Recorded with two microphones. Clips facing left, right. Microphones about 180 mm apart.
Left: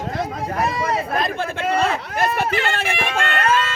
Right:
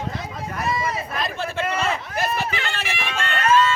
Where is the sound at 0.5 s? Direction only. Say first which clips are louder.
Left 3 dB; 60° left (ahead or behind).